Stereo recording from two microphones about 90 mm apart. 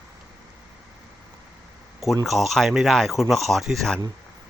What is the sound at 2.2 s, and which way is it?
Speech, centre (ahead or behind).